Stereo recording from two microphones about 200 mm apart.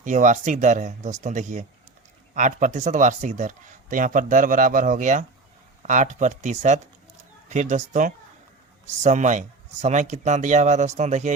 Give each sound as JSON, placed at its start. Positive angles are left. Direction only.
{"t": 0.0, "sound": "speech", "side_deg": -40}